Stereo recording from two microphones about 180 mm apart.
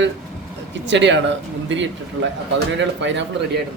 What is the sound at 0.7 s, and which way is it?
Speech, 80° right.